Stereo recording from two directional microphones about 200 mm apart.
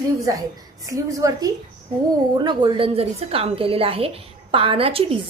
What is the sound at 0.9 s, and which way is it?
A woman's voice, 15° right (ahead or behind).